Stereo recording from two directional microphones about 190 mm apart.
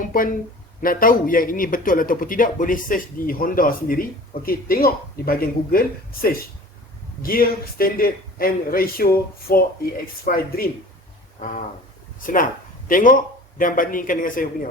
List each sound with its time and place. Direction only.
0.0 s a man's voice: 45° left (ahead or behind)
11.3 s a sound: 45° left (ahead or behind)
12.2 s a man's voice: 45° left (ahead or behind)